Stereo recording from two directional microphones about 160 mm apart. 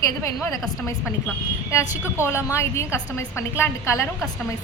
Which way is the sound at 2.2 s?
15° left (ahead or behind).